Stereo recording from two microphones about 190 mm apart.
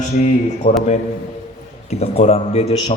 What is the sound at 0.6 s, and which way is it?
Speech, 50° left (ahead or behind).